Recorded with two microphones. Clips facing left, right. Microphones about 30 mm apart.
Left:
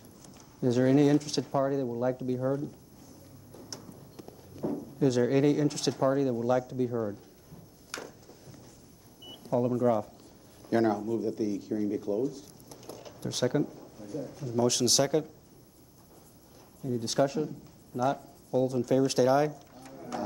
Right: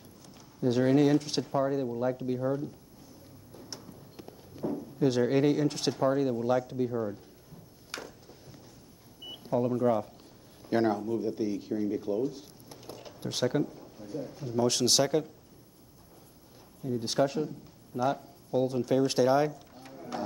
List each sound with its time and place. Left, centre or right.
0.7 s speech: right
3.8 s walk: centre
4.6 s a sound: centre
5.2 s speech: centre
6.9 s speech: centre
7.9 s a sound: centre
9.3 s speech: centre
17.0 s speech: centre